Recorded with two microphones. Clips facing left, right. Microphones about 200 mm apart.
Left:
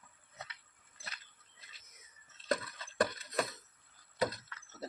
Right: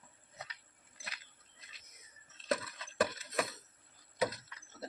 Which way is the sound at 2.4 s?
5° right (ahead or behind).